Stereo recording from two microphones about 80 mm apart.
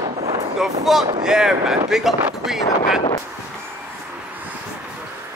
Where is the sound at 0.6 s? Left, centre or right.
Centre.